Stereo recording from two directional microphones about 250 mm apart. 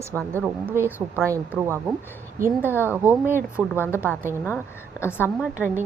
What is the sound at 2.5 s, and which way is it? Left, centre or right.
Speech, centre.